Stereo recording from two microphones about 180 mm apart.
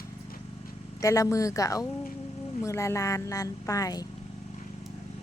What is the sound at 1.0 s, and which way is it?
Speech, 20° left (ahead or behind).